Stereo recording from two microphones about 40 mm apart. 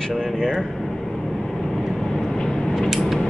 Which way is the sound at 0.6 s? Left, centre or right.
Centre.